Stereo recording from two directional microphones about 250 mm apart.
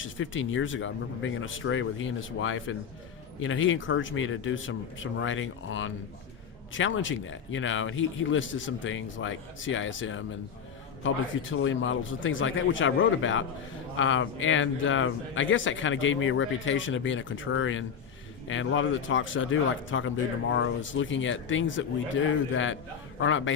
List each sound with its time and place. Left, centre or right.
0.0 s speech: left
11.5 s speech: left